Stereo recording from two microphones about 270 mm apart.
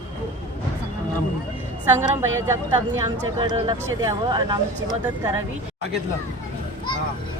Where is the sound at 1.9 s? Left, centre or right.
Centre.